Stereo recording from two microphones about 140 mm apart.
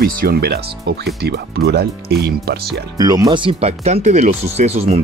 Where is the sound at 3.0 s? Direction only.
25° right (ahead or behind); by 5.0 s 50° right (ahead or behind).